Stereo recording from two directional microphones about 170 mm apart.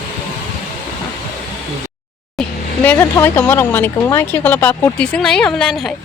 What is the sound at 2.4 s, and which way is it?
Vehicle, centre (ahead or behind).